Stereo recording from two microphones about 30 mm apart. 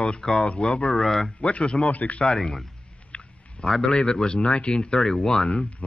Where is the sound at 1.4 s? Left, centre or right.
Left.